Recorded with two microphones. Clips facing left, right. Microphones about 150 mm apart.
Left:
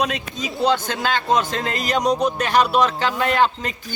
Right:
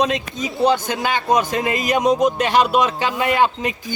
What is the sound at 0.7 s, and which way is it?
Speech, 15° right (ahead or behind).